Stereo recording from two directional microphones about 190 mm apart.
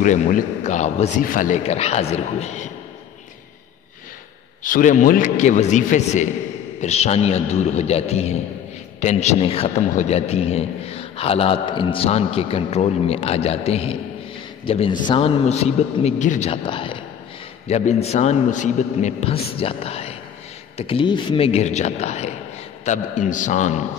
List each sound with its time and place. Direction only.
0.0 s a man's voice: 40° left (ahead or behind)
4.6 s a man's voice: 45° left (ahead or behind)